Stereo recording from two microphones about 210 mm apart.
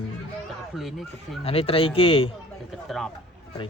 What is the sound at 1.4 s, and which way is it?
Speech, 30° left (ahead or behind).